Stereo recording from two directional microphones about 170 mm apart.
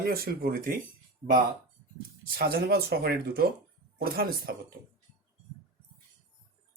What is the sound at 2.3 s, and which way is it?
Speech, 60° right (ahead or behind).